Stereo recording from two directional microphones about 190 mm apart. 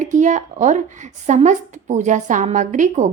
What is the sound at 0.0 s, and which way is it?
Speech, 40° right (ahead or behind).